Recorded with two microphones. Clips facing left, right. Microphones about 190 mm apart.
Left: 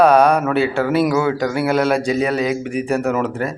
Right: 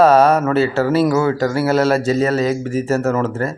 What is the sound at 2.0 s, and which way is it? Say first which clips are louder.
Speech: right 2 dB; 15° left (ahead or behind).